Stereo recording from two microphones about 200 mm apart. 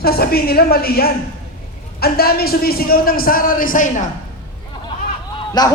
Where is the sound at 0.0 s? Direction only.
50° left (ahead or behind).